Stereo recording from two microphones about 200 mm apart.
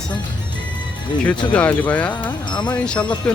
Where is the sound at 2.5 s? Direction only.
20° left (ahead or behind).